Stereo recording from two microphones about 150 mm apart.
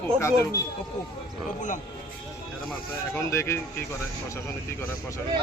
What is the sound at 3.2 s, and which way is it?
Speech, 20° left (ahead or behind).